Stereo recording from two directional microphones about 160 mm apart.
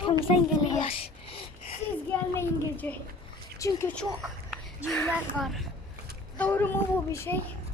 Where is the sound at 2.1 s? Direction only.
15° left (ahead or behind).